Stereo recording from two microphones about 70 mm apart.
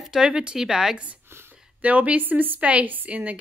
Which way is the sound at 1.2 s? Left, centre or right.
Right.